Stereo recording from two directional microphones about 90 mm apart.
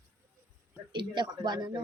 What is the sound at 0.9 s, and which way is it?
Speech, 60° right (ahead or behind).